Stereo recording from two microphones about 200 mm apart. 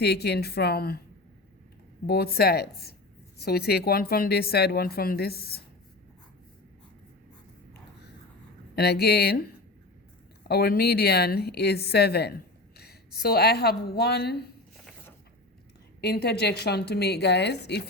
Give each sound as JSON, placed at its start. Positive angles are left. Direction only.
{"t": 0.0, "sound": "speech", "side_deg": 55}
{"t": 2.0, "sound": "speech", "side_deg": 50}
{"t": 8.7, "sound": "speech", "side_deg": 55}
{"t": 10.5, "sound": "speech", "side_deg": 50}
{"t": 16.0, "sound": "a woman's voice", "side_deg": 55}